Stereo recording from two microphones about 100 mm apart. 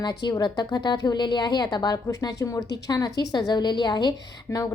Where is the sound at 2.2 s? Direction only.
30° left (ahead or behind).